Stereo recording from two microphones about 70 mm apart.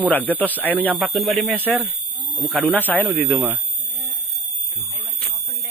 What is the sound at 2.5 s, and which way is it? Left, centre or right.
Speech, right.